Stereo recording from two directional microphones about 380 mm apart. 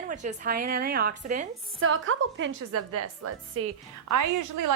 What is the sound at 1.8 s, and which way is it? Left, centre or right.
A woman's voice, right.